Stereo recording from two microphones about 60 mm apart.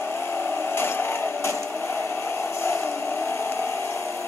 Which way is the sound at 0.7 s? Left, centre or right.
Left.